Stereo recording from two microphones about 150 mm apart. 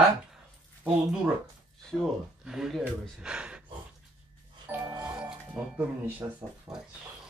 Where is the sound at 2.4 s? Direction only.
5° right (ahead or behind).